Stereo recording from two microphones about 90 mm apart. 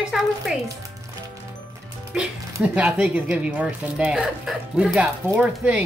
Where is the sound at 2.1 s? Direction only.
10° right (ahead or behind).